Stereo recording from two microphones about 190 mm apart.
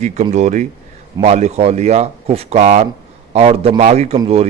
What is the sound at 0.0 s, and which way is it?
A man's voice, 35° right (ahead or behind).